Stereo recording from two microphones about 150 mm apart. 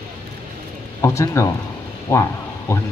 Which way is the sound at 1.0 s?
20° left (ahead or behind).